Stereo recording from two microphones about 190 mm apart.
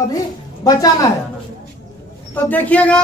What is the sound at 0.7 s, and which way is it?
Speech, 20° left (ahead or behind).